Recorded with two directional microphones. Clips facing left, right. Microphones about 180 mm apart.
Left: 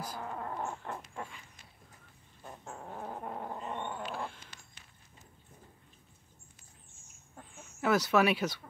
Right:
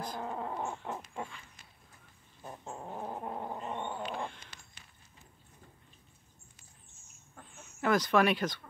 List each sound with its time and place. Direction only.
0.2 s dog: 15° right (ahead or behind)
0.8 s owl: 15° right (ahead or behind)
2.4 s dog: 15° right (ahead or behind)
4.1 s cat: 5° left (ahead or behind)
7.5 s speech: 5° left (ahead or behind)